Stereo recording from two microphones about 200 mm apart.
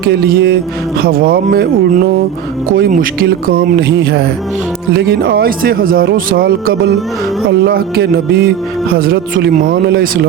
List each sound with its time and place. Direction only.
0.0 s speech: 50° right (ahead or behind)